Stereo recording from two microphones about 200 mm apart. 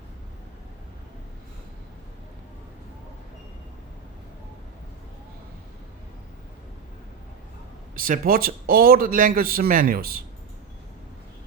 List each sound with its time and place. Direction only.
7.9 s a man's voice: 45° right (ahead or behind)